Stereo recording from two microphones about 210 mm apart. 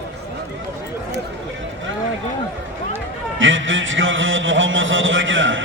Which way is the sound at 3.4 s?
65° right (ahead or behind).